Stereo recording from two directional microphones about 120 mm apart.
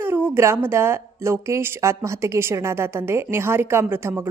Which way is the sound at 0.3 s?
20° right (ahead or behind).